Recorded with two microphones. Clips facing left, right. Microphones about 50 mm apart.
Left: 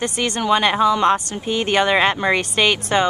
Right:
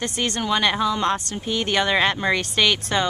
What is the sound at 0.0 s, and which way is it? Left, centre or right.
Speech, centre.